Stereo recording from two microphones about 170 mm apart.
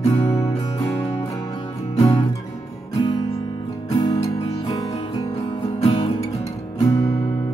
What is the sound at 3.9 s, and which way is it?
Music, 25° left (ahead or behind).